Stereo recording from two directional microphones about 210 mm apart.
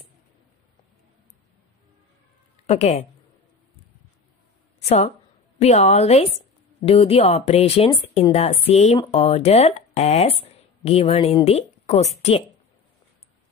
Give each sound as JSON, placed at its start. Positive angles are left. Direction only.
{"t": 2.6, "sound": "speech", "side_deg": 30}
{"t": 4.7, "sound": "a woman's voice", "side_deg": 30}